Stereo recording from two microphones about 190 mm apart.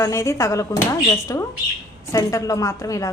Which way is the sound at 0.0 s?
15° left (ahead or behind).